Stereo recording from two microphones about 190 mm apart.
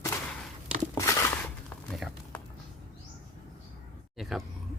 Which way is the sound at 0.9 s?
15° left (ahead or behind).